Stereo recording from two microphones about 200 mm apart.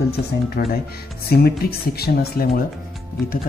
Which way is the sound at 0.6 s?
50° left (ahead or behind).